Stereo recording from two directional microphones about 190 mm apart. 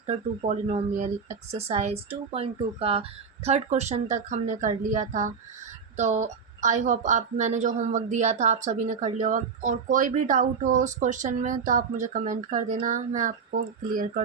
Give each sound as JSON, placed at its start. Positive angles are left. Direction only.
{"t": 0.0, "sound": "a woman's voice", "side_deg": -35}